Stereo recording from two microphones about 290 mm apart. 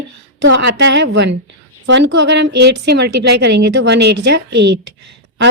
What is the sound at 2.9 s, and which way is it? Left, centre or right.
A woman's voice, right.